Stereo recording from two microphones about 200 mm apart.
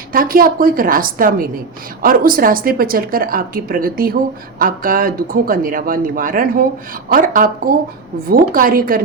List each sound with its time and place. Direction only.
0.1 s a woman's voice: 45° right (ahead or behind)